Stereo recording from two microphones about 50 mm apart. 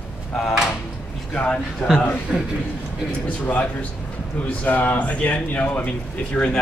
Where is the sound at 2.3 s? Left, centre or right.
Centre.